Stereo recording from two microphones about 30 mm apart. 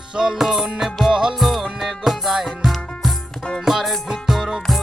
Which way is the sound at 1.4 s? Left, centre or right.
Centre.